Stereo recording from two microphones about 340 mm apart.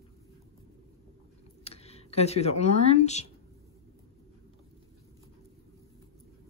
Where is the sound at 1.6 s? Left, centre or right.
Centre.